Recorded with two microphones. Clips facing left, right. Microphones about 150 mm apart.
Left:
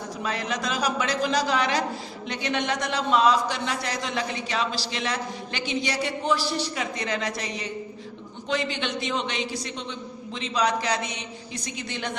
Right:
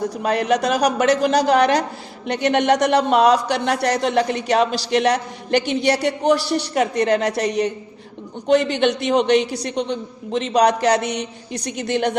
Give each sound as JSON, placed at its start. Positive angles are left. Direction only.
{"t": 0.2, "sound": "speech", "side_deg": -60}